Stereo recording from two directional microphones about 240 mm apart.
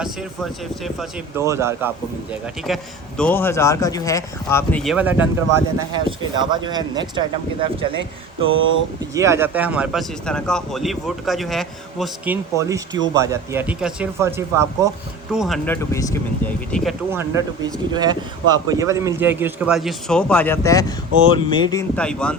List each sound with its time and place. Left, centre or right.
1.4 s speech: centre
2.6 s a man's voice: centre
6.1 s speech: centre
8.4 s a sound: right
9.1 s a man's voice: centre
17.1 s speech: centre